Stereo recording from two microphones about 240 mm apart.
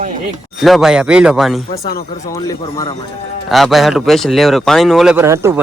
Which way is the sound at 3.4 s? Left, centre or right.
Centre.